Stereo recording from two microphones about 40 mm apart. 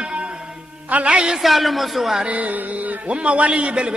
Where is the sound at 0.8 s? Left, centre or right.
Right.